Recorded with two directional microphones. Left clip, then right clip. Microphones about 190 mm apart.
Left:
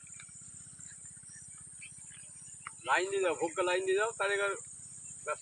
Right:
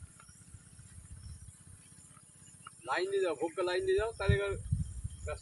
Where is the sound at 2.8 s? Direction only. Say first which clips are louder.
Left 2 dB; 30° left (ahead or behind).